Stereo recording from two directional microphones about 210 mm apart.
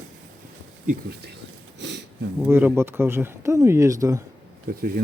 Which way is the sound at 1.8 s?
60° right (ahead or behind).